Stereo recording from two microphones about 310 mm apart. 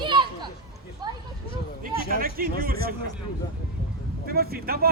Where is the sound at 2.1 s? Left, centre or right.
Right.